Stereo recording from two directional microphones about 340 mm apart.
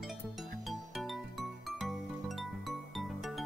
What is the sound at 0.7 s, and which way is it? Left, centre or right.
Music, centre.